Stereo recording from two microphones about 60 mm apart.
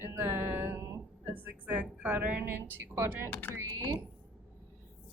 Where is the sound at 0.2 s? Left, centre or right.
Right.